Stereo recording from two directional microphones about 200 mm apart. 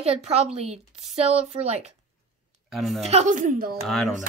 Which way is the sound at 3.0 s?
35° right (ahead or behind).